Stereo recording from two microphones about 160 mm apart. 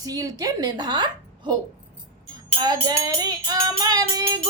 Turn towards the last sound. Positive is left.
turn(degrees=-25)  # may be behind; listen again after turning